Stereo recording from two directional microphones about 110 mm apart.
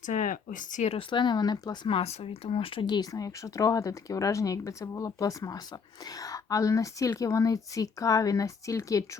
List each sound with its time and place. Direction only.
0.8 s speech: 70° left (ahead or behind)
1.1 s speech: 40° left (ahead or behind)
1.9 s speech: 60° left (ahead or behind); by 9.0 s 30° left (ahead or behind)